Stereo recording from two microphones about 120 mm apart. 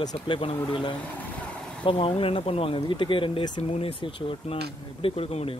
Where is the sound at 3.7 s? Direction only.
55° left (ahead or behind).